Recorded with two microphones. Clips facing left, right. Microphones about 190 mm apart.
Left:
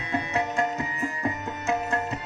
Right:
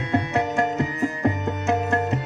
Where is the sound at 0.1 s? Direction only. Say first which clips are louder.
Right 5 dB; 70° right (ahead or behind).